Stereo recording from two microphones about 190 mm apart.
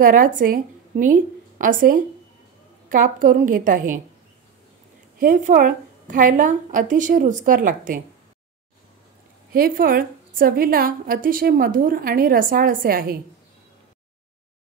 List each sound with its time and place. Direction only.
0.0 s a woman's voice: 45° right (ahead or behind)
5.2 s a woman's voice: 45° right (ahead or behind)
9.5 s a woman's voice: 50° right (ahead or behind)